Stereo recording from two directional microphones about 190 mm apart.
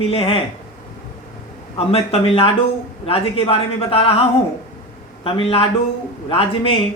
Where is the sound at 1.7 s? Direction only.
30° left (ahead or behind).